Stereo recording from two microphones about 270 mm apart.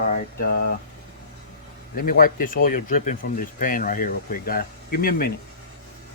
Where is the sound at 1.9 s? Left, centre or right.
Left.